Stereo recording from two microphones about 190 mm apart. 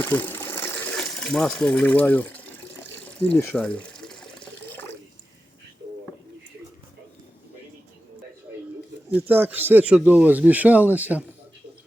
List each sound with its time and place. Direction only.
0.0 s water: 10° left (ahead or behind)
9.1 s speech: 10° right (ahead or behind)